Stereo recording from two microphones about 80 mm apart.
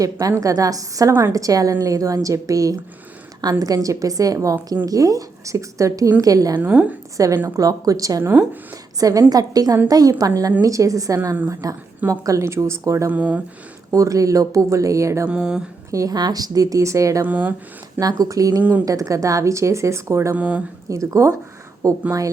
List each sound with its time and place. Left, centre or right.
0.0 s speech: right
6.6 s a woman's voice: centre
7.4 s speech: right
8.2 s a woman's voice: right
9.0 s speech: right
13.1 s a woman's voice: centre
13.9 s speech: right
15.3 s speech: centre
15.9 s a woman's voice: right
16.1 s speech: right
17.2 s a woman's voice: centre
18.0 s speech: right
20.3 s speech: centre
20.9 s speech: right